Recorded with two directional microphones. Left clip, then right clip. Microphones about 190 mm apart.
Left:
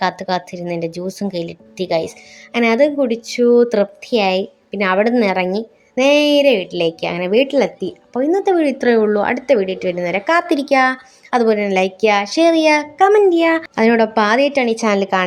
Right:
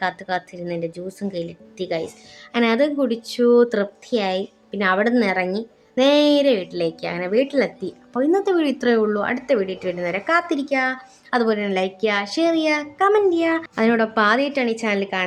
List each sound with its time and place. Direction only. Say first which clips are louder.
0.0 s a woman's voice: left 5 dB; 20° left (ahead or behind)